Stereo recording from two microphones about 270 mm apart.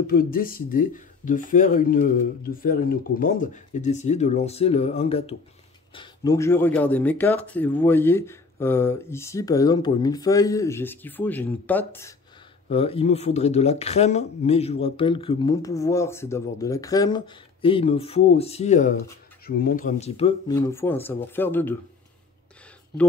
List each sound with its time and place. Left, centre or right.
0.0 s speech: left; by 12.2 s centre
12.7 s speech: left